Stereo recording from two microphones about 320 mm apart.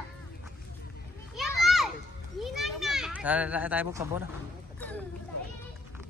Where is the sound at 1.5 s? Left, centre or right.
Centre.